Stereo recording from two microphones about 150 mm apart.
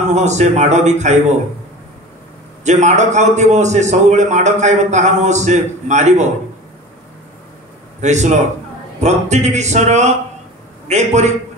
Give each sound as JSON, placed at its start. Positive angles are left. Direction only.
{"t": 0.0, "sound": "a man's voice", "side_deg": -50}
{"t": 2.6, "sound": "a man's voice", "side_deg": -50}
{"t": 8.0, "sound": "a man's voice", "side_deg": -50}